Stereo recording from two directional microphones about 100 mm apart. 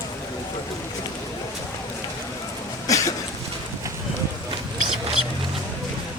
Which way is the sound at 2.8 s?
35° left (ahead or behind).